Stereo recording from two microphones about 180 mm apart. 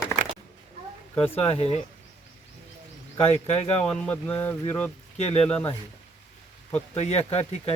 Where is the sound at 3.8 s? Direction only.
5° left (ahead or behind).